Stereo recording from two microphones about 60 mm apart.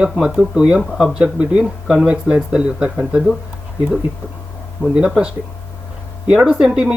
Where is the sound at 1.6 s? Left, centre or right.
Centre.